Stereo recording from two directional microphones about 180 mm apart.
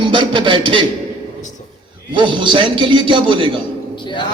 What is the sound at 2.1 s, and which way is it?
Speech, 25° right (ahead or behind).